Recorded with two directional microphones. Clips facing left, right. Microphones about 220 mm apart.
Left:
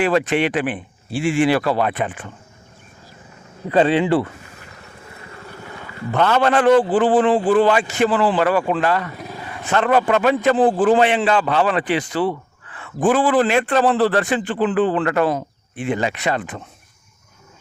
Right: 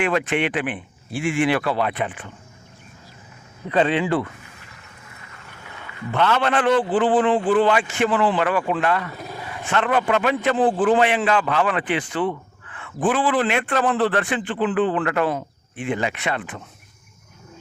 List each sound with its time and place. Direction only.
0.0 s speech: 35° left (ahead or behind)
3.7 s speech: 35° left (ahead or behind)
6.1 s speech: 40° left (ahead or behind)